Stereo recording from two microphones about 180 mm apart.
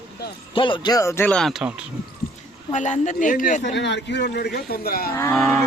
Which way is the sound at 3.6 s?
75° left (ahead or behind).